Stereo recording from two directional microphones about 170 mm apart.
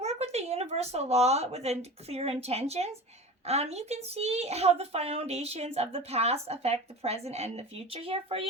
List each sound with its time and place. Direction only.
0.0 s a woman's voice: 40° right (ahead or behind)